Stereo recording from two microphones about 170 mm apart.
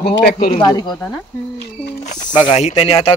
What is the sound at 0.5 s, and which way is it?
Speech, 25° left (ahead or behind).